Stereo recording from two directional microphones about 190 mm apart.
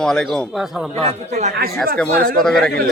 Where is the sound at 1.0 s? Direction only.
35° right (ahead or behind).